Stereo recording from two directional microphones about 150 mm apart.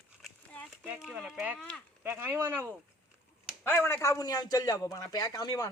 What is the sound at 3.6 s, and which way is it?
A man's voice, 15° left (ahead or behind).